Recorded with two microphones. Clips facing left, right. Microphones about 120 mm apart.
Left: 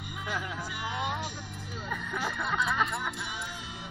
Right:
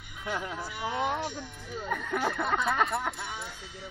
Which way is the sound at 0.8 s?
40° right (ahead or behind).